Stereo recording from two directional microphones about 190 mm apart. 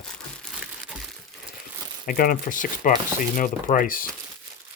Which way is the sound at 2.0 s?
45° left (ahead or behind).